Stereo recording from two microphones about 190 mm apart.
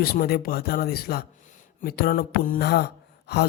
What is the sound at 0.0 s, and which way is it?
Speech, 50° left (ahead or behind).